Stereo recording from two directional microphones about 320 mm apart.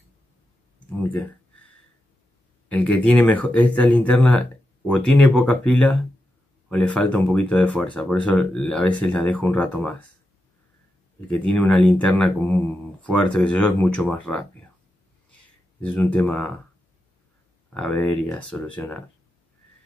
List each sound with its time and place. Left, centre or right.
0.7 s a sound: centre
2.7 s speech: centre
11.3 s speech: centre
15.8 s speech: centre
17.7 s speech: centre